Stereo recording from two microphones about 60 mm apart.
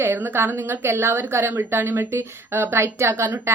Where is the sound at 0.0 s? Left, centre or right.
Right.